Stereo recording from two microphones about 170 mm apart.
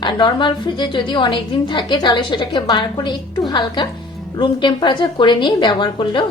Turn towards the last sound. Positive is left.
turn(degrees=25)  # may be behind; listen again after turning